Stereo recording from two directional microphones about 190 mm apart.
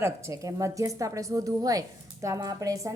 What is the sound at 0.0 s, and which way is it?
A woman's voice, 15° right (ahead or behind).